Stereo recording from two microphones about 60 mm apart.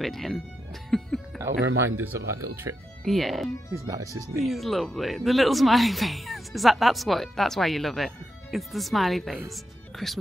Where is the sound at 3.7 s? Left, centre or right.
Right.